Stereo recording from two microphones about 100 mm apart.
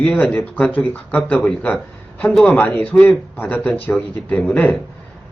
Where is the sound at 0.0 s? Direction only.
10° left (ahead or behind).